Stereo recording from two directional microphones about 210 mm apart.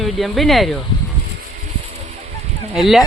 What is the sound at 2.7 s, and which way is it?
Speech, centre (ahead or behind).